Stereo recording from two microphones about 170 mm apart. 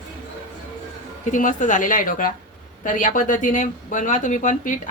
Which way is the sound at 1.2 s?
50° left (ahead or behind).